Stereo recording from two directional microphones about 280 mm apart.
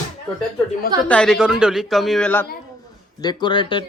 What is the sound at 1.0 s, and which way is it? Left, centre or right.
A woman's voice, centre.